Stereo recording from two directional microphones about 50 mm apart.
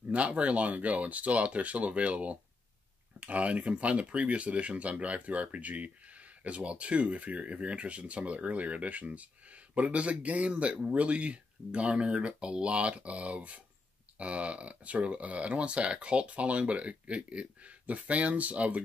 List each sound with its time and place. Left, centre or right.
0.0 s speech: right